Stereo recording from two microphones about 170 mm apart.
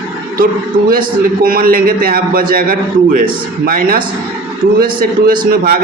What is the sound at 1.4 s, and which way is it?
A man's voice, 60° right (ahead or behind).